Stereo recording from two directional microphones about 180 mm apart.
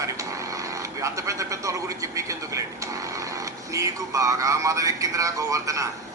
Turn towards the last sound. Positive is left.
turn(degrees=-20)  # may be behind; listen again after turning